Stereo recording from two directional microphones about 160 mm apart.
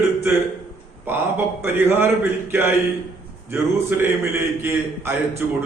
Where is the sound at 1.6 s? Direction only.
15° right (ahead or behind).